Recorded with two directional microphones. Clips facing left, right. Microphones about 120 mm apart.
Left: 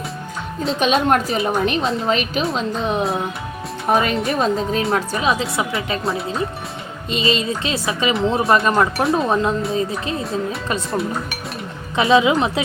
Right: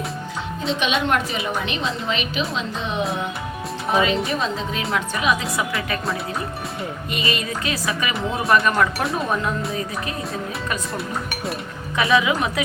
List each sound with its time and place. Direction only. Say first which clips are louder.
0.8 s a woman's voice: left 6 dB; 40° left (ahead or behind)
3.8 s a woman's voice: left 2 dB; 50° left (ahead or behind)
4.8 s speech: left 4 dB; 30° left (ahead or behind)
11.9 s speech: left 4 dB; 25° left (ahead or behind)